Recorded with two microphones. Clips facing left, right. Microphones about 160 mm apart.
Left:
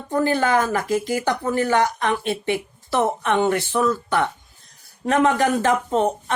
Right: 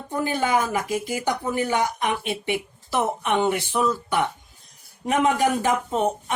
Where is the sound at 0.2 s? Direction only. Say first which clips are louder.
Left 4 dB; 15° right (ahead or behind).